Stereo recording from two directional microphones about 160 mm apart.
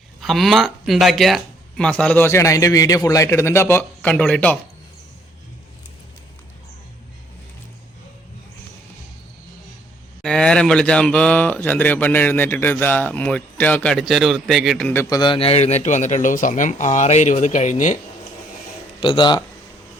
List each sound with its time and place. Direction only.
0.2 s speech: centre (ahead or behind)
10.2 s speech: 5° left (ahead or behind)
14.8 s speech: 15° left (ahead or behind)
15.2 s a man's voice: 35° left (ahead or behind); by 17.9 s 50° left (ahead or behind)
18.9 s speech: 30° left (ahead or behind)